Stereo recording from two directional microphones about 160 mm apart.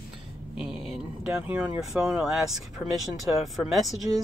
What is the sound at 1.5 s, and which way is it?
Speech, 5° right (ahead or behind).